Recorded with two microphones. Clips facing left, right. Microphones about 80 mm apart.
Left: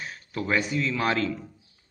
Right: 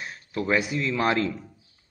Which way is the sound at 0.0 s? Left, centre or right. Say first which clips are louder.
Right 2 dB; centre.